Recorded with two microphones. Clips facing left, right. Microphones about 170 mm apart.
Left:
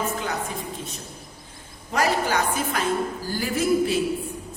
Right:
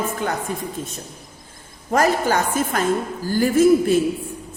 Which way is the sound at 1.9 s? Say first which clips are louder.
Right 5 dB; 45° right (ahead or behind).